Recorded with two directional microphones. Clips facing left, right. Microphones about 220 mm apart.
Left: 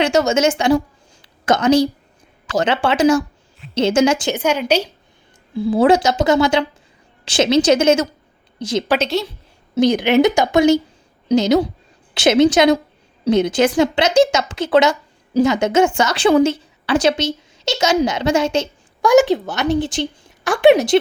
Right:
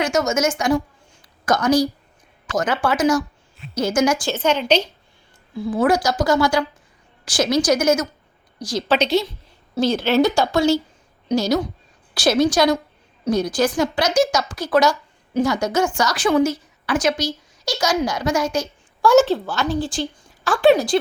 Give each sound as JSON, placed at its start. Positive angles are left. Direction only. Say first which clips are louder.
{"t": 0.0, "sound": "a woman's voice", "louder": "left 4 dB", "side_deg": 30}
{"t": 5.5, "sound": "a woman's voice", "louder": "left 5 dB", "side_deg": 30}
{"t": 9.0, "sound": "a woman's voice", "louder": "right 1 dB", "side_deg": 0}
{"t": 9.7, "sound": "a woman's voice", "louder": "left 4 dB", "side_deg": 15}
{"t": 19.1, "sound": "a woman's voice", "louder": "left 3 dB", "side_deg": 15}
{"t": 20.7, "sound": "speech", "louder": "left 5 dB", "side_deg": 75}